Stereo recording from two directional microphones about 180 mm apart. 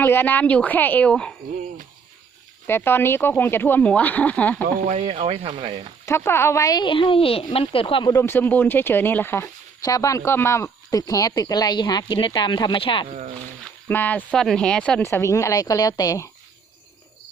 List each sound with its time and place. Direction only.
0.0 s speech: 10° left (ahead or behind)
2.6 s speech: 10° left (ahead or behind)
4.6 s speech: 40° right (ahead or behind)
6.1 s speech: 15° left (ahead or behind); by 8.1 s 30° left (ahead or behind)
8.1 s speech: 15° left (ahead or behind); by 13.1 s 30° left (ahead or behind)
13.8 s speech: 10° left (ahead or behind)